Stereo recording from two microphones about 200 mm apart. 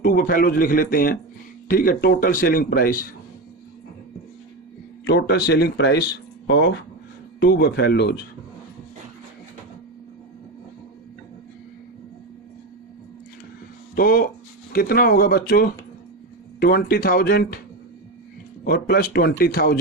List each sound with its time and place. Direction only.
0.0 s speech: 45° left (ahead or behind)
5.0 s speech: 60° left (ahead or behind)
7.3 s speech: 55° left (ahead or behind)
13.9 s speech: 45° left (ahead or behind)
18.6 s speech: 50° left (ahead or behind)